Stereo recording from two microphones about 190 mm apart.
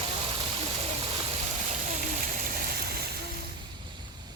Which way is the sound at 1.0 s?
35° right (ahead or behind).